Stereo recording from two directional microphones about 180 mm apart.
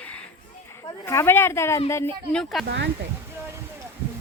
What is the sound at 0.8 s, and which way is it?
Speech, 15° left (ahead or behind).